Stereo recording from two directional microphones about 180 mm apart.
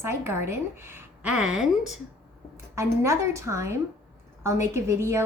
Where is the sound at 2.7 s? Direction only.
15° right (ahead or behind).